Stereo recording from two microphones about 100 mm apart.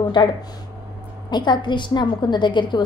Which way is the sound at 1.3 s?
50° left (ahead or behind).